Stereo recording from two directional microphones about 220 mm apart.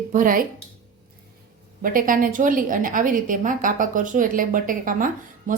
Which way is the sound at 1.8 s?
40° right (ahead or behind).